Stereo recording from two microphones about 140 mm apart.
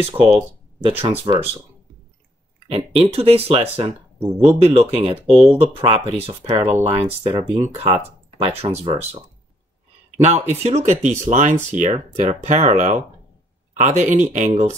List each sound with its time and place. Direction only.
0.0 s speech: 40° right (ahead or behind)
2.7 s speech: 45° right (ahead or behind)